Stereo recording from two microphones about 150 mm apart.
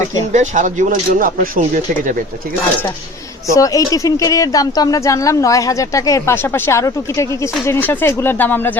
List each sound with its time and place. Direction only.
0.3 s speech: 55° right (ahead or behind)
3.5 s a woman's voice: 20° left (ahead or behind)